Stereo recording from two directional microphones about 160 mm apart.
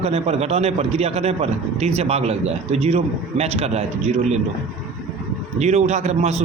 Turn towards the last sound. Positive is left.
turn(degrees=-45)  # may be behind; listen again after turning